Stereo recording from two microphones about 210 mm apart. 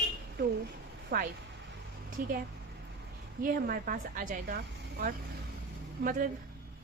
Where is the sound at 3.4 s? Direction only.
45° right (ahead or behind).